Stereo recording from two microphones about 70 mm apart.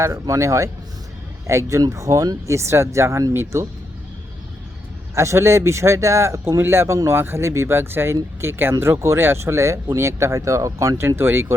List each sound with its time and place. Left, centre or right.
0.0 s speech: right
2.6 s speech: right
5.1 s speech: right